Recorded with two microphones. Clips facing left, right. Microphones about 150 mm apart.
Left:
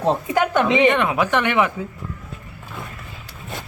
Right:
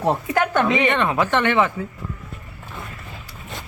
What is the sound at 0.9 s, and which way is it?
Speech, 10° left (ahead or behind).